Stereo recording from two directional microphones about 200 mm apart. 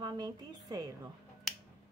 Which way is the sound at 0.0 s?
20° right (ahead or behind).